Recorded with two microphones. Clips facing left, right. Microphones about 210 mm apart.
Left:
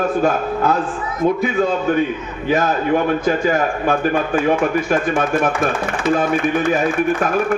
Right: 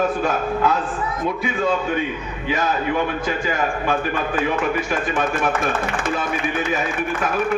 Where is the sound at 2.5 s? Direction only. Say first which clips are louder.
Left 5 dB; 50° left (ahead or behind).